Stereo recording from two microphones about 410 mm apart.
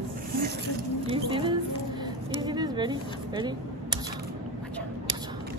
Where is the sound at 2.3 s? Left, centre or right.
Centre.